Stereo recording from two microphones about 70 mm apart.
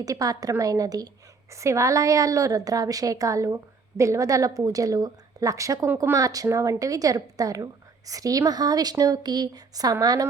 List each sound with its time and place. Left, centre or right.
0.0 s a woman's voice: right
1.5 s a woman's voice: right